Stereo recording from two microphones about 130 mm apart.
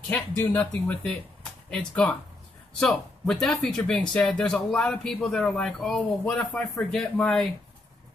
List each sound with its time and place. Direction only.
0.1 s speech: 15° left (ahead or behind)